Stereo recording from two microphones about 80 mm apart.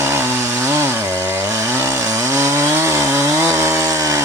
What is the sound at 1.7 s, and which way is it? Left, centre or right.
Chainsaw, right.